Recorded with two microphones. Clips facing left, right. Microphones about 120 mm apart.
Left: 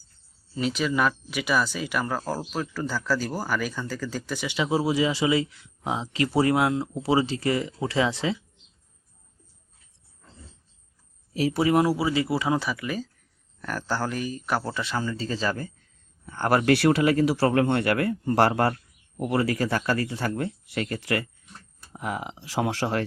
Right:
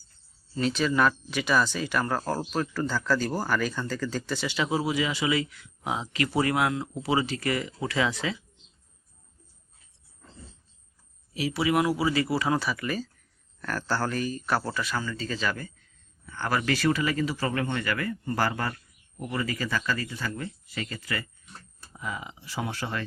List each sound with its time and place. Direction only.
0.5 s speech: 10° left (ahead or behind); by 8.4 s 30° left (ahead or behind)
11.3 s speech: 40° left (ahead or behind)
16.2 s speech: 45° left (ahead or behind)
16.5 s speech: 60° left (ahead or behind)
19.1 s speech: 85° left